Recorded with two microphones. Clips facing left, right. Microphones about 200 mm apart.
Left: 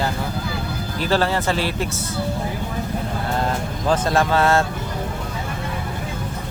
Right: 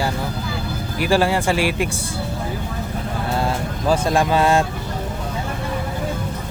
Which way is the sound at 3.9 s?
15° right (ahead or behind).